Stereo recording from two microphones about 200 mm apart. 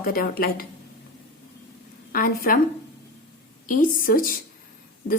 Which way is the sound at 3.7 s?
45° left (ahead or behind).